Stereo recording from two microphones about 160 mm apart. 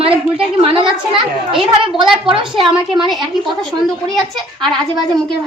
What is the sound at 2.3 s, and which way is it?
Speech, 35° right (ahead or behind).